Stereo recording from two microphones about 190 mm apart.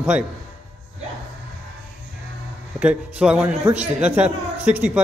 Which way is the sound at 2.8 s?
5° right (ahead or behind).